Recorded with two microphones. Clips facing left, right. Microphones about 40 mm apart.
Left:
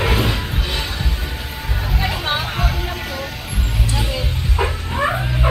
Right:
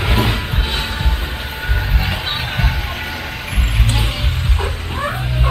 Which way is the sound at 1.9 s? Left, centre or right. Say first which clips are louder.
Left 1 dB; right.